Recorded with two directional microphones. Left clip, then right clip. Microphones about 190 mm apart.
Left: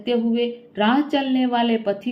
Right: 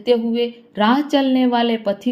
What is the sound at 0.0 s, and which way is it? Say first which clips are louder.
A woman's voice: right 4 dB; 40° right (ahead or behind).